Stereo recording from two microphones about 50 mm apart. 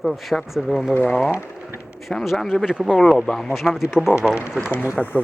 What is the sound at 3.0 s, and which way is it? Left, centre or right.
Speech, centre.